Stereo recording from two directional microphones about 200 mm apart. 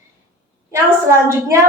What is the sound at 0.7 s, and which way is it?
Speech, 15° right (ahead or behind).